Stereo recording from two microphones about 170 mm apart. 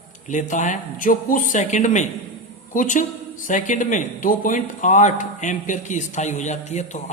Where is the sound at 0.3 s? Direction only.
45° left (ahead or behind).